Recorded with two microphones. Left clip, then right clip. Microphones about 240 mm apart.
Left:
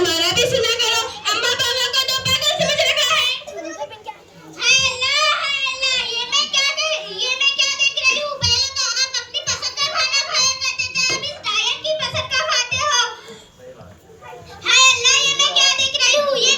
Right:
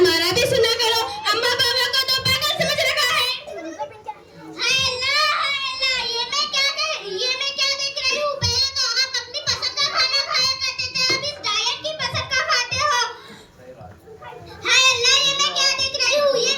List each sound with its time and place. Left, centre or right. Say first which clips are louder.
0.0 s a sound: even; right
4.6 s child singing: left 4 dB; right
14.6 s child singing: left 3 dB; right